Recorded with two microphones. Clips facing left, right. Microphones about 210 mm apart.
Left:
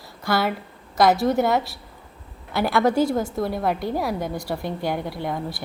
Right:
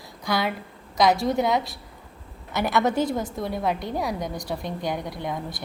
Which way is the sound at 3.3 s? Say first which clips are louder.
Left 3 dB; centre (ahead or behind).